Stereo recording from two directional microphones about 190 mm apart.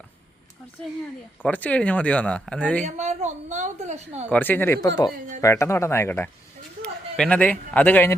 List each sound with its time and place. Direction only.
1.4 s speech: 10° left (ahead or behind)
2.8 s a woman's voice: 35° right (ahead or behind)
4.3 s speech: 10° left (ahead or behind)